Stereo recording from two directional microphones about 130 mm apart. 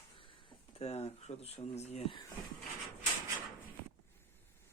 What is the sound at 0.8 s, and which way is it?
Speech, 50° left (ahead or behind).